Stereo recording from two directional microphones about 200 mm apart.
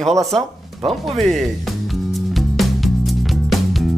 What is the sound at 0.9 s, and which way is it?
Music, centre (ahead or behind).